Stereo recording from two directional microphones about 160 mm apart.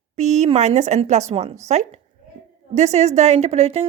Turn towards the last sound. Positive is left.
turn(degrees=-40)  # may be behind; listen again after turning